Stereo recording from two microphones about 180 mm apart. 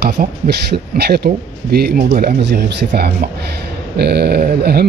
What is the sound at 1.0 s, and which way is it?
Speech, 60° right (ahead or behind).